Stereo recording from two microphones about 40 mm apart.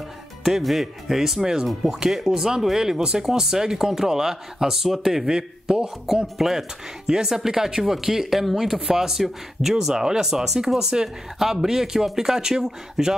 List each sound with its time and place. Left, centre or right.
0.4 s speech: centre